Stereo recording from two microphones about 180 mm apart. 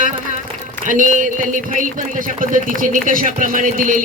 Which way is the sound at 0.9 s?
45° right (ahead or behind).